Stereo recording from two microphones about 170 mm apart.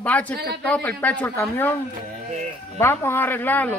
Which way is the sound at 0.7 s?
10° left (ahead or behind).